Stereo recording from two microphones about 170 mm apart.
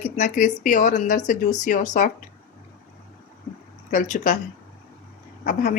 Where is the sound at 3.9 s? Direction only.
45° left (ahead or behind).